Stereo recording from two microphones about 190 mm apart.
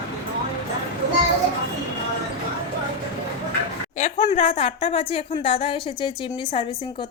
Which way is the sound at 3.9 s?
40° left (ahead or behind).